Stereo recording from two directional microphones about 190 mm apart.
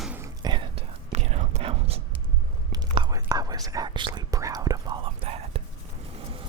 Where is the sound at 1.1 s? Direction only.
35° right (ahead or behind).